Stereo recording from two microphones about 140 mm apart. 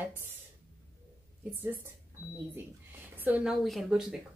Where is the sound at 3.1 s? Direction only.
10° right (ahead or behind).